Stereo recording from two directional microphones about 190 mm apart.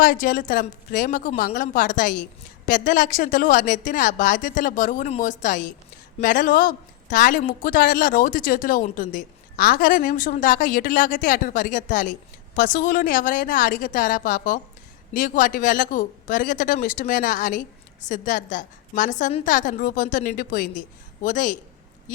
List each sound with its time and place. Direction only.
0.0 s speech: 50° left (ahead or behind)